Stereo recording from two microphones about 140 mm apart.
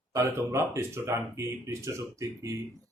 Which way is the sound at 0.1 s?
20° right (ahead or behind).